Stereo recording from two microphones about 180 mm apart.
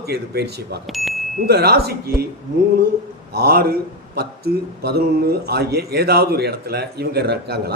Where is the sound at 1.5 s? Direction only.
60° right (ahead or behind).